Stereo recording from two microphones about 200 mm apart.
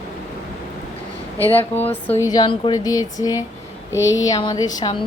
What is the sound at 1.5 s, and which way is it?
Speech, 10° left (ahead or behind).